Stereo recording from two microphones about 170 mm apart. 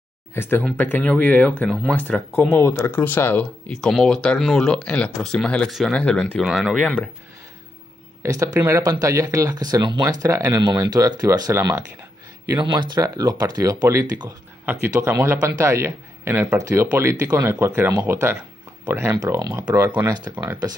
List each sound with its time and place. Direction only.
0.3 s speech: 10° left (ahead or behind)
6.8 s speech: 10° left (ahead or behind)
8.2 s a man's voice: 20° right (ahead or behind)